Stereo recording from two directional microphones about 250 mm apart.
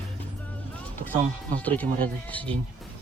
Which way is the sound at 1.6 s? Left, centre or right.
Centre.